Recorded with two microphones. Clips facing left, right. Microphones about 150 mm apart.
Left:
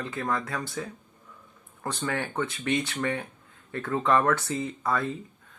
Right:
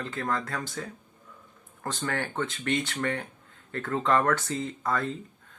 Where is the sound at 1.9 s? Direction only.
15° left (ahead or behind).